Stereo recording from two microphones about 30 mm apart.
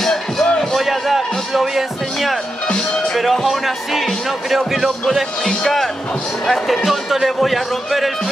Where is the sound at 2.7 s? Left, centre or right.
Centre.